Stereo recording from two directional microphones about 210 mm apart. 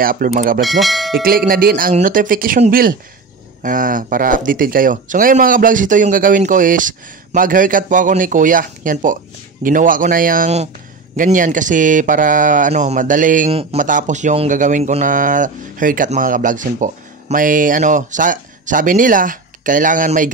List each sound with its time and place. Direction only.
0.0 s speech: 40° right (ahead or behind)
0.6 s speech: centre (ahead or behind)
1.5 s speech: 45° right (ahead or behind)